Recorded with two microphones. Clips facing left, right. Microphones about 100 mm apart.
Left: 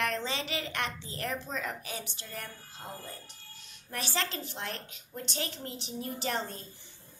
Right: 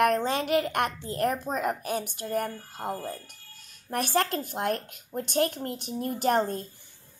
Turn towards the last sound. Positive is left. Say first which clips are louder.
# right 9 dB
turn(degrees=-50)  # may be behind; listen again after turning